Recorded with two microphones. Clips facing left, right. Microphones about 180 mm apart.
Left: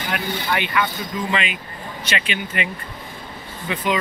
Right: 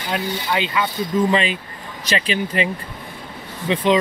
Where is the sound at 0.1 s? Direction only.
25° right (ahead or behind).